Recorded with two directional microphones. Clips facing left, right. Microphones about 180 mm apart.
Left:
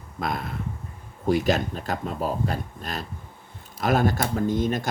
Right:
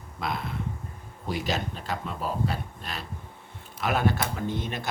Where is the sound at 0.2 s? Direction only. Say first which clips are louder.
Left 3 dB; 50° left (ahead or behind).